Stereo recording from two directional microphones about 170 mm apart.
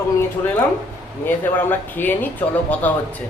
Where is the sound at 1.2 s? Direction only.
10° left (ahead or behind).